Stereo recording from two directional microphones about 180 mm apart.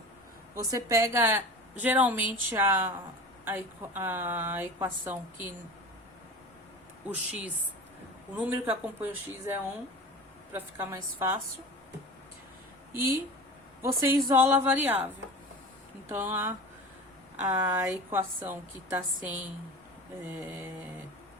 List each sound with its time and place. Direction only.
0.5 s a woman's voice: 15° right (ahead or behind)
7.1 s a woman's voice: 5° right (ahead or behind)
10.5 s a woman's voice: 10° right (ahead or behind)
12.9 s a woman's voice: 15° right (ahead or behind)